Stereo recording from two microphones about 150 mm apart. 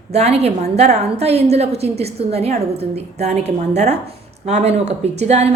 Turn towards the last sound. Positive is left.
turn(degrees=-45)  # may be behind; listen again after turning